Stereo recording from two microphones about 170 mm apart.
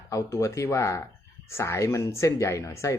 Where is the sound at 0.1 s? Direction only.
20° left (ahead or behind).